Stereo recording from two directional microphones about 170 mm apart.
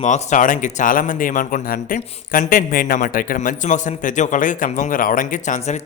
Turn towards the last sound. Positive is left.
turn(degrees=45)  # may be behind; listen again after turning